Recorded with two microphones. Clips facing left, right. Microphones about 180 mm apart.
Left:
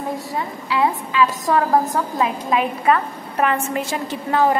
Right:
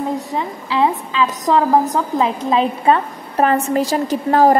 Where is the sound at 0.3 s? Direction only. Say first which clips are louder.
Right 2 dB; 25° right (ahead or behind).